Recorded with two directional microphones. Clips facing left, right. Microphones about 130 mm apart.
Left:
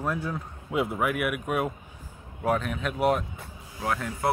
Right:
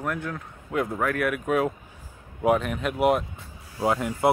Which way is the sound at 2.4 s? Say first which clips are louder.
Right 4 dB; 10° right (ahead or behind).